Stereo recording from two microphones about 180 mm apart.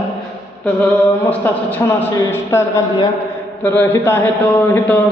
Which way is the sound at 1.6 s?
10° left (ahead or behind).